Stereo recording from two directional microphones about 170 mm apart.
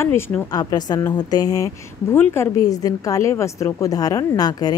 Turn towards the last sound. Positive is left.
turn(degrees=20)  # may be behind; listen again after turning